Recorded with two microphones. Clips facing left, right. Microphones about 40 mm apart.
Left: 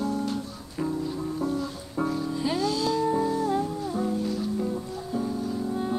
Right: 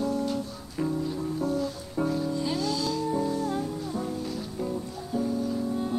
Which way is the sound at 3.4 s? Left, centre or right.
Centre.